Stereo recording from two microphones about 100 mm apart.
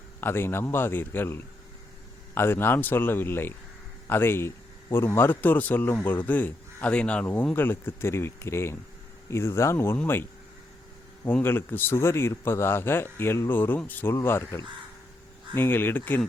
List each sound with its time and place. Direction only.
0.2 s a man's voice: 25° left (ahead or behind)
11.3 s a man's voice: 20° left (ahead or behind)